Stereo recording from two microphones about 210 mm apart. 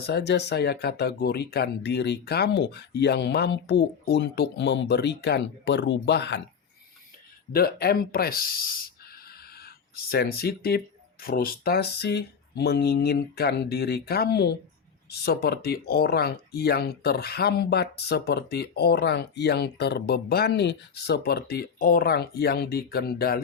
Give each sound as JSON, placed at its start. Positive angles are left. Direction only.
{"t": 0.0, "sound": "speech", "side_deg": 55}
{"t": 7.5, "sound": "speech", "side_deg": 50}
{"t": 9.6, "sound": "speech", "side_deg": 45}